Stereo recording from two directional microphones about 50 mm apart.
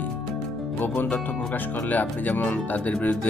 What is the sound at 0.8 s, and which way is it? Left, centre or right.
Speech, left.